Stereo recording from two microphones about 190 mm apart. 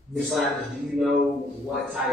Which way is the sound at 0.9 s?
Centre (ahead or behind).